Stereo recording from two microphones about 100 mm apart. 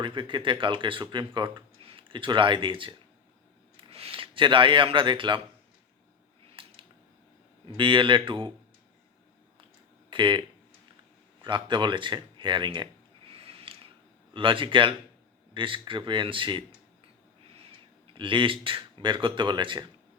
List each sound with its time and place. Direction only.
0.0 s speech: 55° right (ahead or behind)
3.8 s speech: 75° right (ahead or behind); by 5.4 s 55° right (ahead or behind)
6.6 s a sound: 60° right (ahead or behind)
7.8 s speech: 55° right (ahead or behind)
10.1 s speech: 55° right (ahead or behind)
11.4 s speech: 50° right (ahead or behind)
13.3 s a sound: 70° right (ahead or behind)
14.3 s speech: 60° right (ahead or behind)
18.1 s speech: 55° right (ahead or behind)